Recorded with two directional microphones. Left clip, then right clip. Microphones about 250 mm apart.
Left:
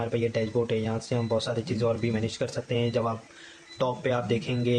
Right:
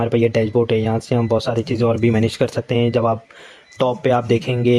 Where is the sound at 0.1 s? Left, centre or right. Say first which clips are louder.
Right 11 dB; right.